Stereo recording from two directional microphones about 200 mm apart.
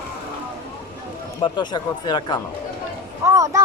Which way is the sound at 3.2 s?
15° right (ahead or behind).